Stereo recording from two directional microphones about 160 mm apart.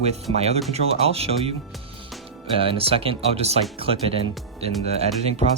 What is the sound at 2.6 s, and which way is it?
Speech, 35° right (ahead or behind).